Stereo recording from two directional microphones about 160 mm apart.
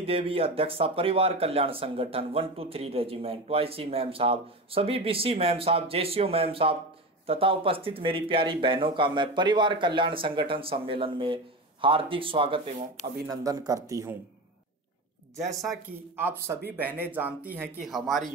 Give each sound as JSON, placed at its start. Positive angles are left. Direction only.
{"t": 0.0, "sound": "speech", "side_deg": -35}
{"t": 13.3, "sound": "speech", "side_deg": -20}
{"t": 16.2, "sound": "speech", "side_deg": -15}